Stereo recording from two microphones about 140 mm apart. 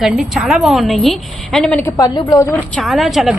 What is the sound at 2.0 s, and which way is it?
Speech, 25° left (ahead or behind).